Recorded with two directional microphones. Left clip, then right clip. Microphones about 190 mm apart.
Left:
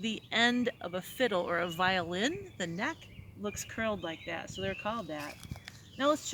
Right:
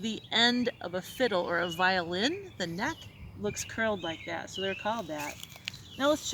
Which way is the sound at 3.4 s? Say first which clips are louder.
Right 4 dB; 15° left (ahead or behind).